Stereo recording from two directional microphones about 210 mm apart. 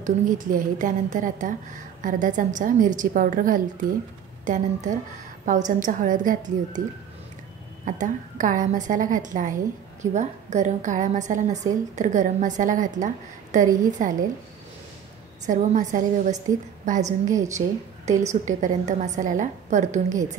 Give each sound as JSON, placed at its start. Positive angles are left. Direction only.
{"t": 0.0, "sound": "a woman's voice", "side_deg": -40}
{"t": 7.8, "sound": "a woman's voice", "side_deg": -40}
{"t": 15.4, "sound": "a woman's voice", "side_deg": -35}